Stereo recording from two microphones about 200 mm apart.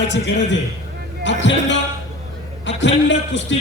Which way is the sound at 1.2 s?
65° left (ahead or behind).